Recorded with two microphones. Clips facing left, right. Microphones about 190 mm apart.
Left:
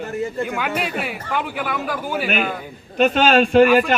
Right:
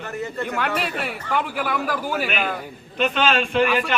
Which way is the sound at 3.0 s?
40° left (ahead or behind).